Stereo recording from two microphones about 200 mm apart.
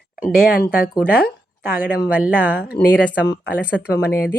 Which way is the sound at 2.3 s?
10° right (ahead or behind).